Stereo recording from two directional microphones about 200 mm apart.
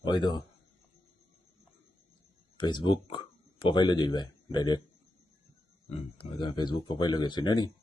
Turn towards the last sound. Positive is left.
turn(degrees=20)  # may be behind; listen again after turning